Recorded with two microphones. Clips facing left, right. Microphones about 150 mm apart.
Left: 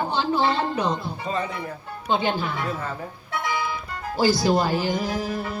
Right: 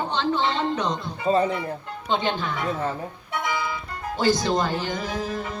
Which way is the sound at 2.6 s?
20° right (ahead or behind).